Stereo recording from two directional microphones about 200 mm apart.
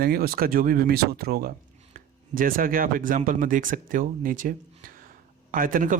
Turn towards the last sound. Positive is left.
turn(degrees=-40)  # may be behind; listen again after turning